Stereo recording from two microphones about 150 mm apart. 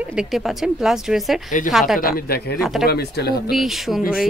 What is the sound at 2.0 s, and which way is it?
Speech, 75° left (ahead or behind).